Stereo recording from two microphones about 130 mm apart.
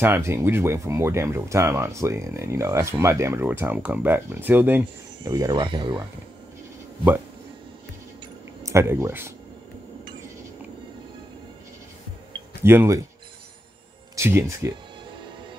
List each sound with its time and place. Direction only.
0.0 s speech: 20° right (ahead or behind)
5.2 s speech: 30° right (ahead or behind)
8.6 s speech: 20° right (ahead or behind)
12.6 s speech: 20° right (ahead or behind)
14.1 s speech: 20° right (ahead or behind)